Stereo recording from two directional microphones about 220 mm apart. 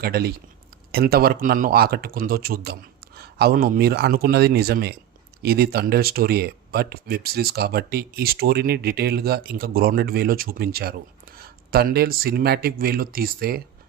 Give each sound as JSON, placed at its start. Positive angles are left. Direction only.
{"t": 0.0, "sound": "speech", "side_deg": -45}